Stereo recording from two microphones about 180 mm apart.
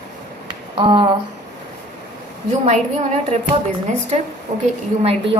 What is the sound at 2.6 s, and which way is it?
Speech, 40° right (ahead or behind).